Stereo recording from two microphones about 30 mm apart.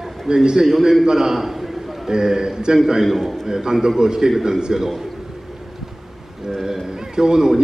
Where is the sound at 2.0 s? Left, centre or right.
Right.